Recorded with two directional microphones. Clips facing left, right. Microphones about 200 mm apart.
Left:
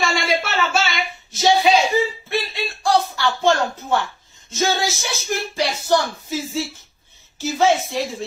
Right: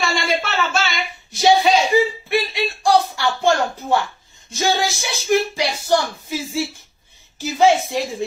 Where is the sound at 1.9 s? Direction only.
15° right (ahead or behind).